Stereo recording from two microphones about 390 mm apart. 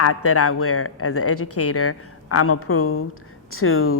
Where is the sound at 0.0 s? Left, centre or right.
Left.